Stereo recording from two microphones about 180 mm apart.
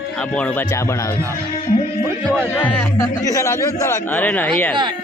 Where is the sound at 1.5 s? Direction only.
50° left (ahead or behind).